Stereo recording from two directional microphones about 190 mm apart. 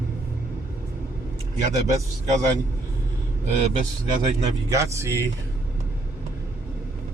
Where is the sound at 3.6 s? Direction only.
40° right (ahead or behind).